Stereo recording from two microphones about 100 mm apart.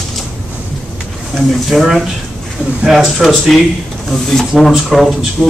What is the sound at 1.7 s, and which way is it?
Speech, centre (ahead or behind).